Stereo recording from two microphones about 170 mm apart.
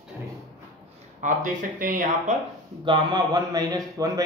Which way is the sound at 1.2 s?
50° right (ahead or behind).